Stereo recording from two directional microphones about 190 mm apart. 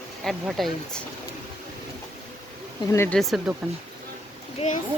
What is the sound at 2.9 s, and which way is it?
Speech, 10° left (ahead or behind).